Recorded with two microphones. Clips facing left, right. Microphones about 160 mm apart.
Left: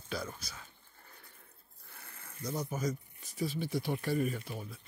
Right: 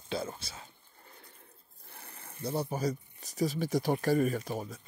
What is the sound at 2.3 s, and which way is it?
Speech, 30° right (ahead or behind).